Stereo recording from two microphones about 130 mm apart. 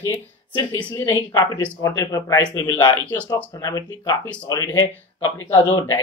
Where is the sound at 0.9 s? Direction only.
25° left (ahead or behind).